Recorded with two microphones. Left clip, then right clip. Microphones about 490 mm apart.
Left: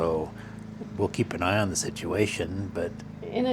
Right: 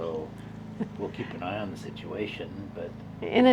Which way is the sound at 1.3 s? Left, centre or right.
Left.